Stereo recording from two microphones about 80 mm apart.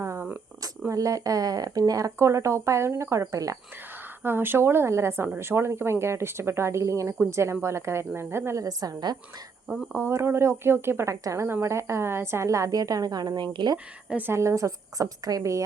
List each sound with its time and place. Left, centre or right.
0.0 s a sound: right
0.9 s a woman's voice: right
4.2 s a woman's voice: right
8.6 s a woman's voice: right
9.9 s a woman's voice: right
14.1 s a woman's voice: right
14.3 s a woman's voice: right